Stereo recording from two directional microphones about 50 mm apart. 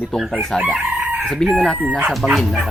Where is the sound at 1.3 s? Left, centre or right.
Centre.